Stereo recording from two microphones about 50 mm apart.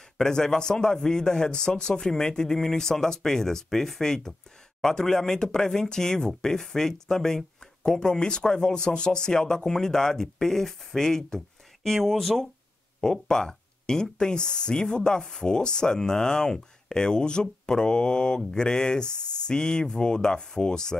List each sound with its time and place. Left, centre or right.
0.2 s speech: centre